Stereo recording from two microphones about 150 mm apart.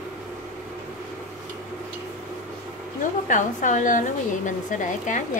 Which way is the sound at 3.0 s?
60° left (ahead or behind).